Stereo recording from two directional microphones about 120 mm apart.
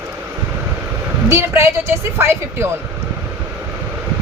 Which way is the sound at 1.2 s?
20° right (ahead or behind).